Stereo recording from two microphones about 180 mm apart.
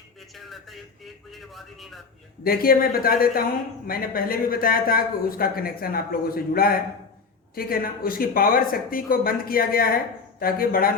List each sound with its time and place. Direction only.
0.3 s a man's voice: centre (ahead or behind)
2.4 s speech: 55° left (ahead or behind)